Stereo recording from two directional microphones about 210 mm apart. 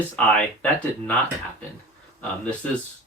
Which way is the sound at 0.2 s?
5° left (ahead or behind).